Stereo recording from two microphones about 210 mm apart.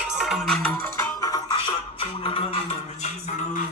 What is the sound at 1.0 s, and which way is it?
Music, 15° left (ahead or behind).